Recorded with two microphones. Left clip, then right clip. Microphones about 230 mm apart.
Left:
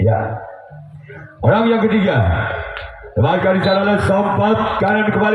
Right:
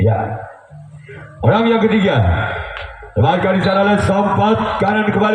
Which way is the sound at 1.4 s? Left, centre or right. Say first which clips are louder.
Right 1 dB; right.